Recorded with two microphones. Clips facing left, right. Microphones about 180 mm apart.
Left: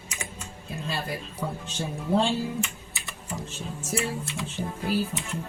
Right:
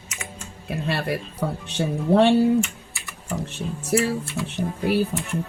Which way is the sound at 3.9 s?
65° right (ahead or behind).